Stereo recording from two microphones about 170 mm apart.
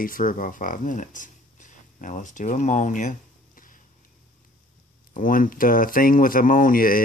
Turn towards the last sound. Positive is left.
turn(degrees=55)  # may be behind; listen again after turning